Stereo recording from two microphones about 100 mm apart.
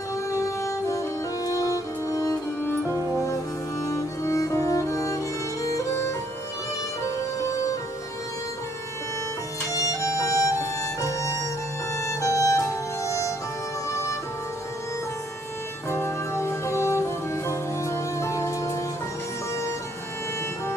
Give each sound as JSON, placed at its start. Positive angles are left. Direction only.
{"t": 0.3, "sound": "music", "side_deg": 30}
{"t": 2.9, "sound": "music", "side_deg": -25}
{"t": 3.8, "sound": "music", "side_deg": 30}
{"t": 7.3, "sound": "music", "side_deg": 30}
{"t": 9.7, "sound": "music", "side_deg": 35}
{"t": 15.9, "sound": "music", "side_deg": 25}